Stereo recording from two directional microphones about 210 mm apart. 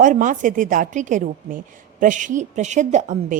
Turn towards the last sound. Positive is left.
turn(degrees=-35)  # may be behind; listen again after turning